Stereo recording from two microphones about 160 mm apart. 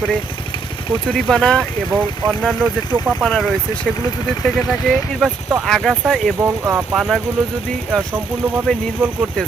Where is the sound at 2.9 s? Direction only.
10° right (ahead or behind).